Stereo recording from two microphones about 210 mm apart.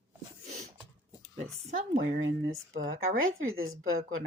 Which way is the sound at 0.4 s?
35° right (ahead or behind).